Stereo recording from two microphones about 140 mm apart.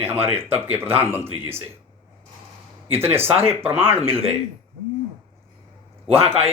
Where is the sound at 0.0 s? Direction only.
15° right (ahead or behind).